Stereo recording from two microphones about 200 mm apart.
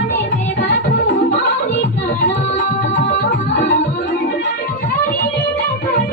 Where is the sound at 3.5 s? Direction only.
60° left (ahead or behind).